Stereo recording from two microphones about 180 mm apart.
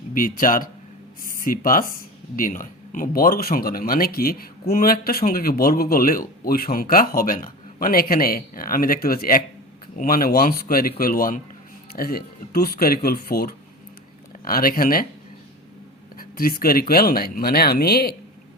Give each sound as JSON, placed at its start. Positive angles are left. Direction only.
{"t": 0.1, "sound": "speech", "side_deg": 50}
{"t": 16.1, "sound": "speech", "side_deg": 55}